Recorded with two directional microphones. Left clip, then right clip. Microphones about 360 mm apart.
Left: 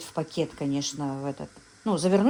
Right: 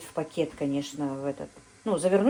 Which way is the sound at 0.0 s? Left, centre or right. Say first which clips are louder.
Even; left.